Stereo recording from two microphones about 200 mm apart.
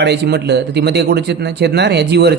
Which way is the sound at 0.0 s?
55° right (ahead or behind).